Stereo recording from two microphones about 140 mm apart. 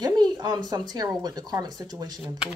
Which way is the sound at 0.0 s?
30° right (ahead or behind).